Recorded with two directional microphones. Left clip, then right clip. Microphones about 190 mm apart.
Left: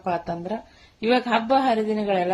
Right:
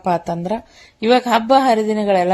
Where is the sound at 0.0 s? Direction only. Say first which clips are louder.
Right 7 dB; 45° right (ahead or behind).